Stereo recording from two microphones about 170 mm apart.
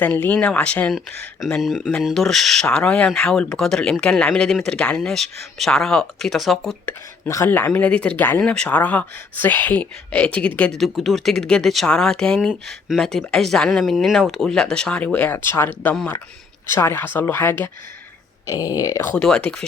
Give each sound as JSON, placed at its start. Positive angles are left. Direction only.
{"t": 0.0, "sound": "speech", "side_deg": 10}
{"t": 7.3, "sound": "speech", "side_deg": 15}
{"t": 19.1, "sound": "speech", "side_deg": 5}